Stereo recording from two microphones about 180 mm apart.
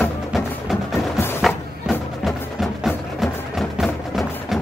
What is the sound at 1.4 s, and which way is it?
Music, centre (ahead or behind).